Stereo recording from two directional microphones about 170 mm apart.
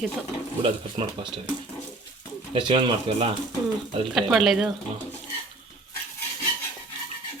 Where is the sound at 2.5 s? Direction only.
30° right (ahead or behind).